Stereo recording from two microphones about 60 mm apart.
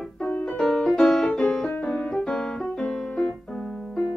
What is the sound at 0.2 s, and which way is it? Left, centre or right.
Music, left.